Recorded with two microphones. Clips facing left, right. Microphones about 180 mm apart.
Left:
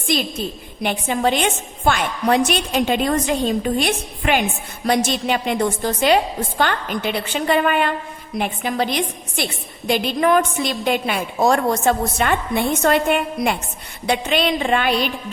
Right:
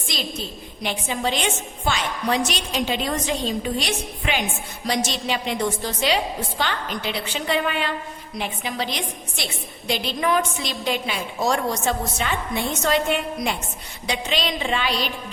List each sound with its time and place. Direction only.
0.1 s a woman's voice: 55° left (ahead or behind)